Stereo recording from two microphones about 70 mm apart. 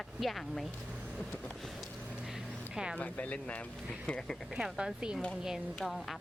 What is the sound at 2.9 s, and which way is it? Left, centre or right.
Speech, left.